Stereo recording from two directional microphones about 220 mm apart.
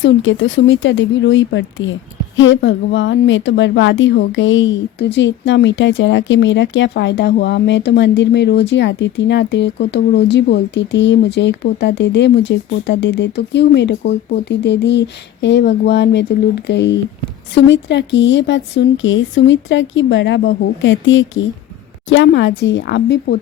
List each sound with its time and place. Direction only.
0.0 s speech: 60° left (ahead or behind)